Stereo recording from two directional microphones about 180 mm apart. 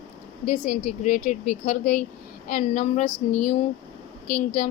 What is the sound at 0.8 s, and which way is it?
A woman's voice, 40° left (ahead or behind).